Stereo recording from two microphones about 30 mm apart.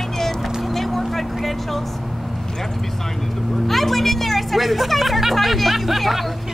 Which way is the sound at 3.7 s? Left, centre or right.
Centre.